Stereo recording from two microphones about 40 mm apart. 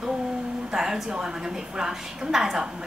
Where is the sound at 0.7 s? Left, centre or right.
Centre.